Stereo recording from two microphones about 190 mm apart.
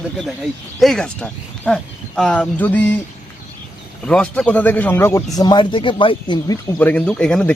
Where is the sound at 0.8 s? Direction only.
Centre (ahead or behind).